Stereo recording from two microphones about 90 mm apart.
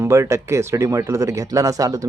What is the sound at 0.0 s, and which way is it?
Speech, 30° right (ahead or behind).